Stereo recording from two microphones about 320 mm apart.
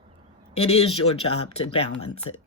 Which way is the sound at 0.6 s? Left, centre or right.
Centre.